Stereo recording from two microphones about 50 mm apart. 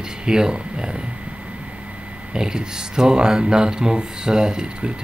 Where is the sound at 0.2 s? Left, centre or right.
Centre.